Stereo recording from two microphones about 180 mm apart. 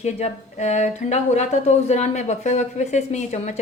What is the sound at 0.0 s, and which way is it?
Speech, 40° left (ahead or behind).